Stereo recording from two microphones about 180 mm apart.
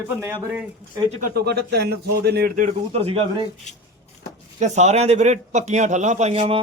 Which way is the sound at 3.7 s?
40° left (ahead or behind).